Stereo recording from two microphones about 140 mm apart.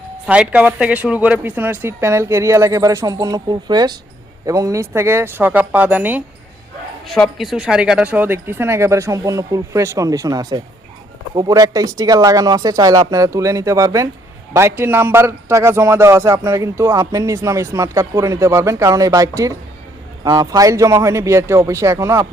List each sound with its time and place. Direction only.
0.3 s a man's voice: 10° right (ahead or behind)
7.1 s a man's voice: centre (ahead or behind); by 22.3 s 20° right (ahead or behind)